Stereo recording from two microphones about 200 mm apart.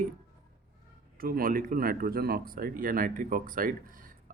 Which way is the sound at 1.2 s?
45° right (ahead or behind).